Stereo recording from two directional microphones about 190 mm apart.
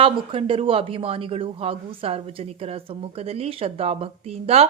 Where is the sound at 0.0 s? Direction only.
30° right (ahead or behind).